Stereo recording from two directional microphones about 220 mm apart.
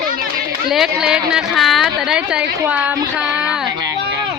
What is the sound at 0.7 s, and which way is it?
A woman's voice, 5° right (ahead or behind).